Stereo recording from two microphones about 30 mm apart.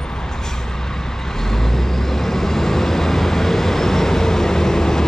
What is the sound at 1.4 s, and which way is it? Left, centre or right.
Vehicle, centre.